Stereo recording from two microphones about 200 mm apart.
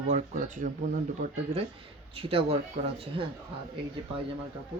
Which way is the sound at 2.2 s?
30° right (ahead or behind).